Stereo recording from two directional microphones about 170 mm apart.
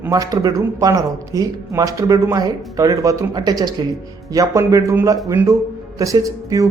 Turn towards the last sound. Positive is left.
turn(degrees=-20)  # may be behind; listen again after turning